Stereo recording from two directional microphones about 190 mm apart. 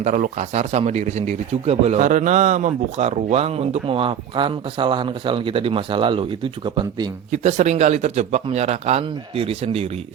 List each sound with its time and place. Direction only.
0.0 s speech: 40° right (ahead or behind)
7.3 s speech: 40° right (ahead or behind)